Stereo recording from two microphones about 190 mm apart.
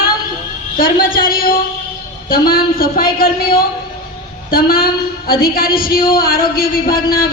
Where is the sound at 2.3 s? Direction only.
50° left (ahead or behind).